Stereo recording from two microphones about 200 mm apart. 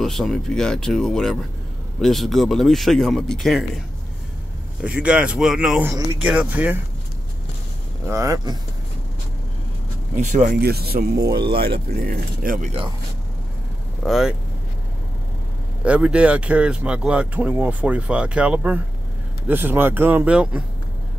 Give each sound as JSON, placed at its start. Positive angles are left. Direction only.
{"t": 0.0, "sound": "speech", "side_deg": 0}
{"t": 4.8, "sound": "speech", "side_deg": -5}
{"t": 8.1, "sound": "speech", "side_deg": -15}
{"t": 10.1, "sound": "speech", "side_deg": -40}
{"t": 10.6, "sound": "speech", "side_deg": -50}
{"t": 14.0, "sound": "speech", "side_deg": 0}
{"t": 15.8, "sound": "speech", "side_deg": -5}